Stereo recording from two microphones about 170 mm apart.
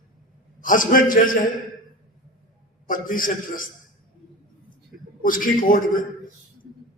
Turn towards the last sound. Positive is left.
turn(degrees=55)  # may be behind; listen again after turning